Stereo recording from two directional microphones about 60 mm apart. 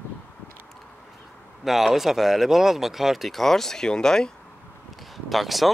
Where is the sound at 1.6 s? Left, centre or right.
Centre.